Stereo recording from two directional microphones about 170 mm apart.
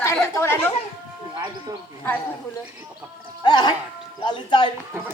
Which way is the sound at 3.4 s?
25° left (ahead or behind).